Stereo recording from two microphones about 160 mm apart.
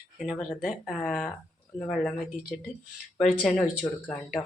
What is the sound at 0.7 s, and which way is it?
Speech, centre (ahead or behind).